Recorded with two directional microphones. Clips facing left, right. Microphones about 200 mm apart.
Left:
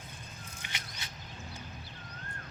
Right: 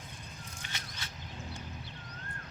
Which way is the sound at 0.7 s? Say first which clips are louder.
Even; 15° left (ahead or behind).